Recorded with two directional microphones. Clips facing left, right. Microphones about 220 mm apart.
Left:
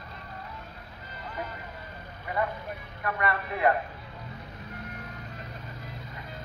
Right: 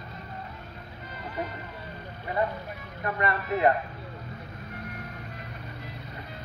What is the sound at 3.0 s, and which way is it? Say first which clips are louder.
Speech: right 1 dB; 25° right (ahead or behind).